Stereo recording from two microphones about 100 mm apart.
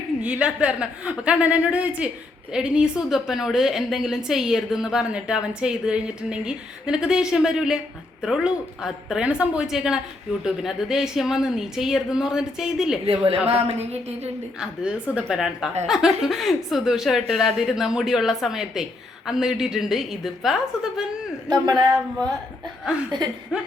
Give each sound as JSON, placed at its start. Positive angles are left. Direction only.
{"t": 0.2, "sound": "a woman's voice", "side_deg": -10}
{"t": 13.5, "sound": "a woman's voice", "side_deg": -85}
{"t": 15.1, "sound": "a woman's voice", "side_deg": -5}
{"t": 21.5, "sound": "a sound", "side_deg": -45}